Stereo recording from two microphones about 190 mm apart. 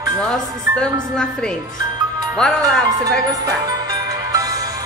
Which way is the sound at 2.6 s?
20° right (ahead or behind).